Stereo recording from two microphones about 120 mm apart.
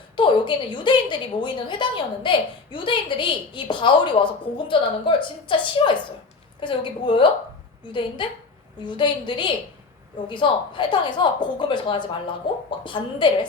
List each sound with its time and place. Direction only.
0.2 s a woman's voice: 40° left (ahead or behind)